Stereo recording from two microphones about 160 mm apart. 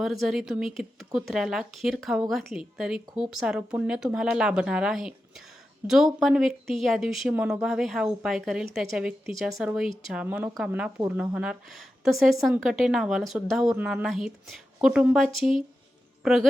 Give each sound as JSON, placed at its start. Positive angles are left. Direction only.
{"t": 0.0, "sound": "speech", "side_deg": 0}